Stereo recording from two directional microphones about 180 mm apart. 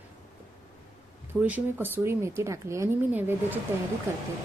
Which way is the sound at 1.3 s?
10° right (ahead or behind).